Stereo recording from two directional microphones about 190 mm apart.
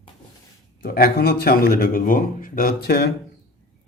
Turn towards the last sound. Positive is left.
turn(degrees=55)  # may be behind; listen again after turning